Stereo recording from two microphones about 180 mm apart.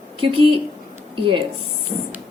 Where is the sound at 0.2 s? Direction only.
30° right (ahead or behind).